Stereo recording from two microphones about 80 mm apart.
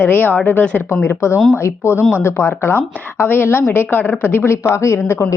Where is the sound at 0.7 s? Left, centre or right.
Left.